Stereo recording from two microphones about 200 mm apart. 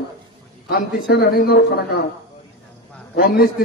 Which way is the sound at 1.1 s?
50° left (ahead or behind).